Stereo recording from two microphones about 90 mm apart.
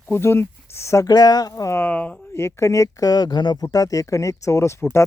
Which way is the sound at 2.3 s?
30° left (ahead or behind).